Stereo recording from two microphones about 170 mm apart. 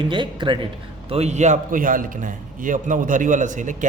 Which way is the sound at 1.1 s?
40° right (ahead or behind).